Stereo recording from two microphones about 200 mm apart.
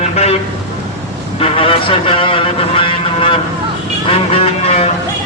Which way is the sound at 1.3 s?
30° left (ahead or behind).